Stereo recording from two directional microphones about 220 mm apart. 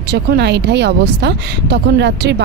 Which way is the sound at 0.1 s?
50° right (ahead or behind).